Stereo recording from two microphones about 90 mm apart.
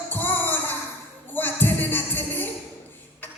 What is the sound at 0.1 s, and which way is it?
Music, 20° left (ahead or behind).